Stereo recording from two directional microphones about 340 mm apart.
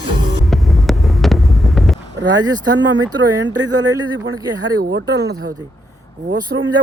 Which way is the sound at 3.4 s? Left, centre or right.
Right.